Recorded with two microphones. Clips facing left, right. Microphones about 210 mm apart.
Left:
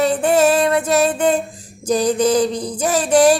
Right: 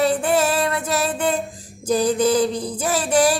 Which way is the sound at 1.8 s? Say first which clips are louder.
Left 2 dB; 90° left.